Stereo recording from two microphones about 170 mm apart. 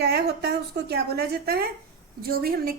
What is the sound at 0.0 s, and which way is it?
A woman's voice, 70° right (ahead or behind).